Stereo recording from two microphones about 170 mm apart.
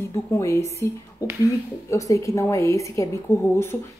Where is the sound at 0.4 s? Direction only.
15° left (ahead or behind).